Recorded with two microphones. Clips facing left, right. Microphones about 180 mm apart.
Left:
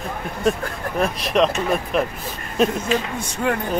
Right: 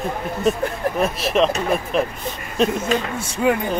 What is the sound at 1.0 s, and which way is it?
Speech, centre (ahead or behind).